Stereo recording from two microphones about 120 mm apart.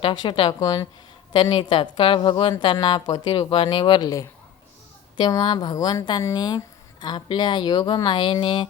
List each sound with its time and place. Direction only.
0.0 s a woman's voice: 40° left (ahead or behind)
0.6 s speech: 30° left (ahead or behind)
1.3 s a woman's voice: 40° left (ahead or behind)
5.1 s speech: 35° left (ahead or behind)